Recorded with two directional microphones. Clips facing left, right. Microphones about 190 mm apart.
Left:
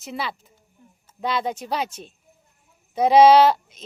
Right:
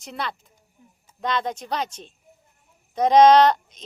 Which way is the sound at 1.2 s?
5° left (ahead or behind).